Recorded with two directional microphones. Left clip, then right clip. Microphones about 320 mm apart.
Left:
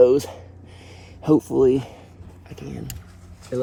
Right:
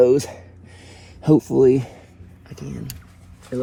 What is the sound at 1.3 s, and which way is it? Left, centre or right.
Speech, right.